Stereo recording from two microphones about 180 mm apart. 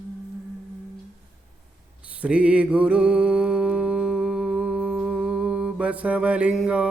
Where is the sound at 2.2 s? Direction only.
5° right (ahead or behind).